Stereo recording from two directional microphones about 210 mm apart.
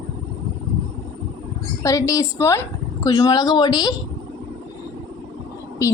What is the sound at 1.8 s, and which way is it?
A woman's voice, 15° left (ahead or behind).